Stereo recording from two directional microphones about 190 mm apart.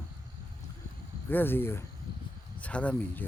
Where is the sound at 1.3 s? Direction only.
10° left (ahead or behind).